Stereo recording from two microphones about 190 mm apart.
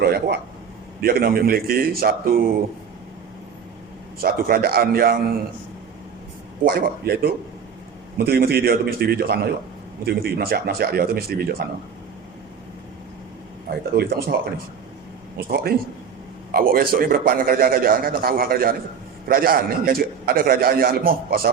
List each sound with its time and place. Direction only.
0.0 s a man's voice: 60° right (ahead or behind)
4.2 s a man's voice: 50° right (ahead or behind)
6.6 s a man's voice: 50° right (ahead or behind)
13.9 s a man's voice: 55° right (ahead or behind)
15.4 s a man's voice: 55° right (ahead or behind)